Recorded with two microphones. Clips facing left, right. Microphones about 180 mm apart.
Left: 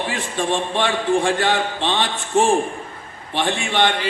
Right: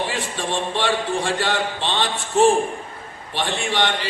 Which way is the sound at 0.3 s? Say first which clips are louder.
Left 5 dB; 55° left (ahead or behind).